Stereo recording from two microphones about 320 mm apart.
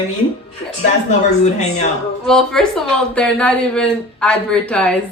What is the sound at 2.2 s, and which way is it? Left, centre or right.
Speech, centre.